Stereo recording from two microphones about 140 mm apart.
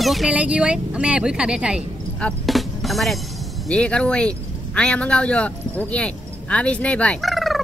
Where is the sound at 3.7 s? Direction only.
5° left (ahead or behind).